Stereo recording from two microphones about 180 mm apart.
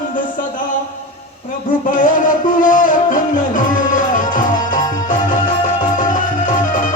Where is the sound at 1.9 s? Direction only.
50° left (ahead or behind).